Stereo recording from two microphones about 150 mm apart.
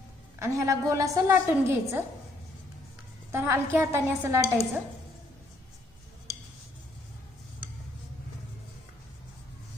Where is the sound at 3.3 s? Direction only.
15° right (ahead or behind).